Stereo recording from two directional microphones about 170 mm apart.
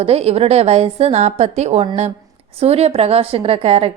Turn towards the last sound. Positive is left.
turn(degrees=-35)  # may be behind; listen again after turning